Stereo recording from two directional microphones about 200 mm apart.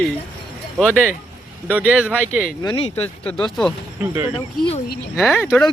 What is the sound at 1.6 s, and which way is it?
Speech, 10° right (ahead or behind).